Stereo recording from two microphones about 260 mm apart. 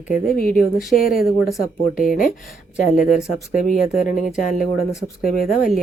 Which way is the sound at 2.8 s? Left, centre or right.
Left.